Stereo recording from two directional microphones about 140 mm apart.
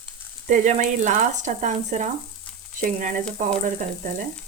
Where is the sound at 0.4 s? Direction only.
60° right (ahead or behind).